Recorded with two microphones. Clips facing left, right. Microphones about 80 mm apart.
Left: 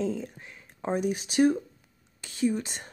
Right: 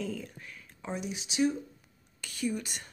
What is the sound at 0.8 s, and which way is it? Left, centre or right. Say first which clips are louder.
Speech: left 9 dB; left.